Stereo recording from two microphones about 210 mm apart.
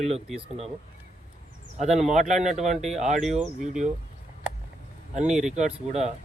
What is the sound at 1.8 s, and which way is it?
Speech, 35° right (ahead or behind).